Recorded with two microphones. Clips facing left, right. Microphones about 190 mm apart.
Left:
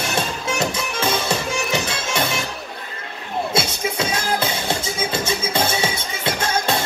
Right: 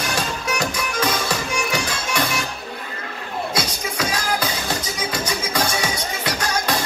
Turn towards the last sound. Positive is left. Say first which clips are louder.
# left 2 dB
turn(degrees=25)  # may be behind; listen again after turning